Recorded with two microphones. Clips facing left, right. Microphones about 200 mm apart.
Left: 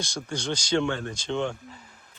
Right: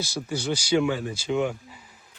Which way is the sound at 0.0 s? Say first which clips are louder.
Right 3 dB; 5° right (ahead or behind).